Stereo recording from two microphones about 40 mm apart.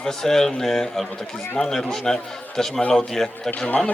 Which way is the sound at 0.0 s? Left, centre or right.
Centre.